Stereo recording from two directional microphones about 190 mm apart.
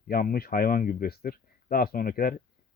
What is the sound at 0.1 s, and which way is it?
Speech, 50° left (ahead or behind).